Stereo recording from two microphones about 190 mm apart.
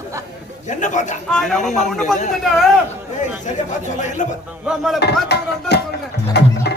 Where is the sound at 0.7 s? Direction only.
40° left (ahead or behind).